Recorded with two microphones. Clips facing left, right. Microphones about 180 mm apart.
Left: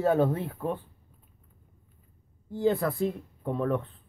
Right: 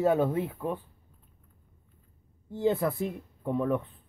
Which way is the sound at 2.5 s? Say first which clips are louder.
Left 1 dB; 20° right (ahead or behind).